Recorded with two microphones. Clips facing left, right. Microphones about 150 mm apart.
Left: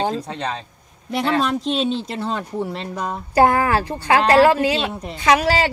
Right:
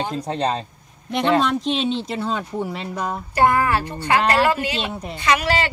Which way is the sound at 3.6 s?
90° left.